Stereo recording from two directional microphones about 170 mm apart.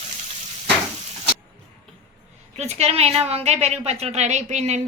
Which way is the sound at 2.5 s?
40° right (ahead or behind).